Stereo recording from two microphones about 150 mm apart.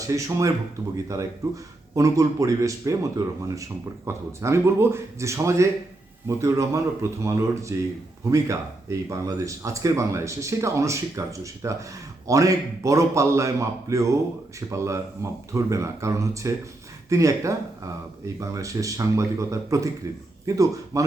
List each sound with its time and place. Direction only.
0.1 s speech: 20° right (ahead or behind)